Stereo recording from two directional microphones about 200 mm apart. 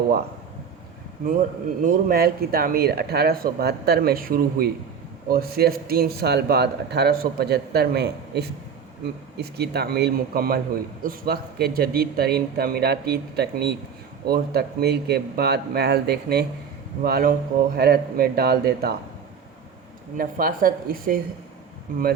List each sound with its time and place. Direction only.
1.3 s speech: 40° right (ahead or behind)
20.1 s speech: 45° right (ahead or behind)